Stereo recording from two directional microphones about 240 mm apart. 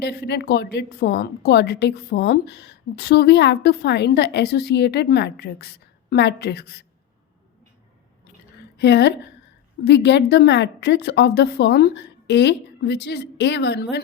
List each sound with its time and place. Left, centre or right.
0.0 s a woman's voice: left
8.8 s a woman's voice: left